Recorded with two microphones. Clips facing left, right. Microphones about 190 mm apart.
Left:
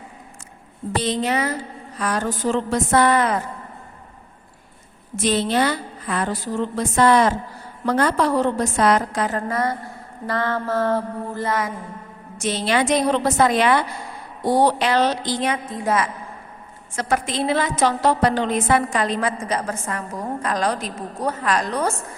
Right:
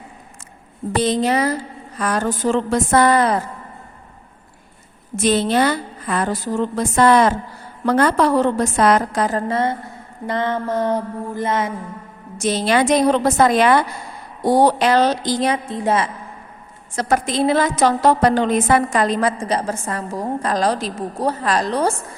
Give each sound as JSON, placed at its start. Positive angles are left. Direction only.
{"t": 0.9, "sound": "a woman's voice", "side_deg": -40}
{"t": 2.0, "sound": "a woman's voice", "side_deg": -50}
{"t": 5.1, "sound": "a woman's voice", "side_deg": -50}
{"t": 7.9, "sound": "a woman's voice", "side_deg": -60}
{"t": 8.8, "sound": "a woman's voice", "side_deg": -45}
{"t": 9.5, "sound": "mantra", "side_deg": -25}
{"t": 12.4, "sound": "a woman's voice", "side_deg": -40}